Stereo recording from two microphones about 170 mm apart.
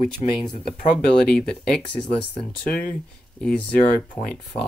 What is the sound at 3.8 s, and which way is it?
Speech, 55° left (ahead or behind).